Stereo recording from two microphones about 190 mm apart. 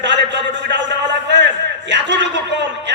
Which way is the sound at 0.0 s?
70° right (ahead or behind).